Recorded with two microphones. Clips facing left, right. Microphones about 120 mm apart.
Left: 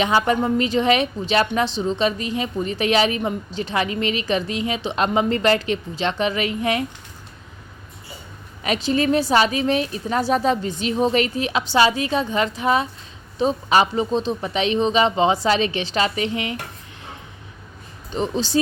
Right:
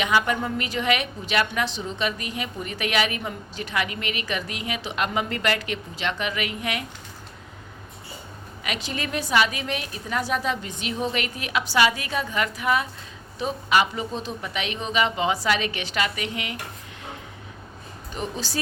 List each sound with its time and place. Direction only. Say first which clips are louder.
0.0 s a woman's voice: left 4 dB; 30° left (ahead or behind)
8.6 s a woman's voice: left 11 dB; 35° left (ahead or behind)
18.1 s a woman's voice: left 9 dB; 25° left (ahead or behind)